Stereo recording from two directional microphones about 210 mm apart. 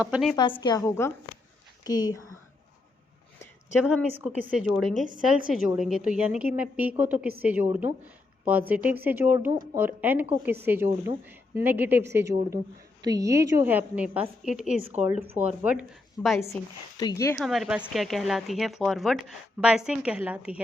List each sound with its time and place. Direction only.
0.0 s a woman's voice: 5° right (ahead or behind)
0.3 s a woman's voice: 20° left (ahead or behind)
3.8 s a woman's voice: 5° right (ahead or behind)
17.0 s speech: 15° left (ahead or behind)
17.4 s a woman's voice: centre (ahead or behind)